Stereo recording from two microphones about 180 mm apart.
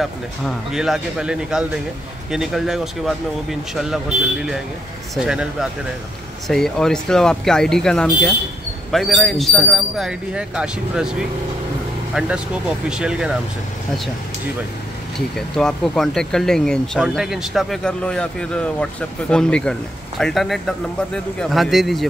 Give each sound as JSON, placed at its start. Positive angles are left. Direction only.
{"t": 0.0, "sound": "speech", "side_deg": 0}
{"t": 15.1, "sound": "speech", "side_deg": 5}